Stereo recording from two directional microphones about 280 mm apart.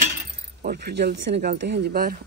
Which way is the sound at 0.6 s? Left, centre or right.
Right.